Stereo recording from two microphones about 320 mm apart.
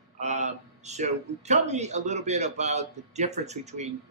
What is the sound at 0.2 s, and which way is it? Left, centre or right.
A man's voice, right.